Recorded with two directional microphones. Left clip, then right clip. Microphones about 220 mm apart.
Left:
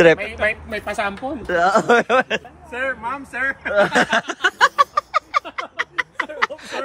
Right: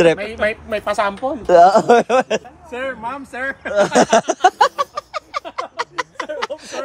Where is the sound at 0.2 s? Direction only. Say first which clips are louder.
Right 1 dB; 50° right (ahead or behind).